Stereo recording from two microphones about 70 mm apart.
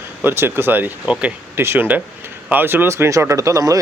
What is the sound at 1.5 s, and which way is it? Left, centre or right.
Speech, right.